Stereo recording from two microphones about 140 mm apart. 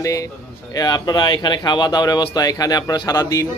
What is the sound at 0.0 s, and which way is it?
Speech, 25° left (ahead or behind).